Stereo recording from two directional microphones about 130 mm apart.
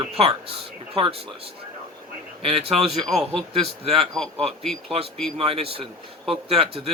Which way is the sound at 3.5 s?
45° right (ahead or behind).